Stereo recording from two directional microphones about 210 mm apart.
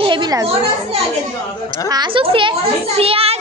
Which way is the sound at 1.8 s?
20° right (ahead or behind).